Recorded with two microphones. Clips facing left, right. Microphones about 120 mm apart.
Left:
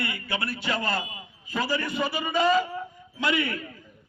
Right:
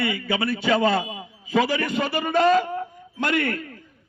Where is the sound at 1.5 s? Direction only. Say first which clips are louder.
Right 6 dB; 90° right; by 3.6 s 55° right (ahead or behind).